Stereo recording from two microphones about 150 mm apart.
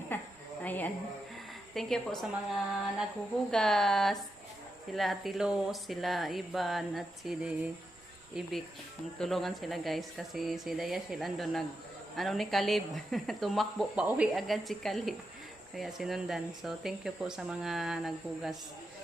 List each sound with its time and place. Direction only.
0.1 s a sound: 15° left (ahead or behind)
1.7 s speech: centre (ahead or behind)
3.5 s speech: 5° left (ahead or behind)